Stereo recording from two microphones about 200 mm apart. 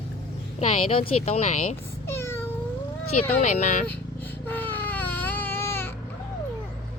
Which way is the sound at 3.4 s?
40° left (ahead or behind).